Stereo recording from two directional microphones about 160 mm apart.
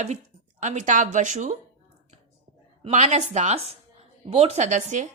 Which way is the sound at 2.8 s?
45° right (ahead or behind).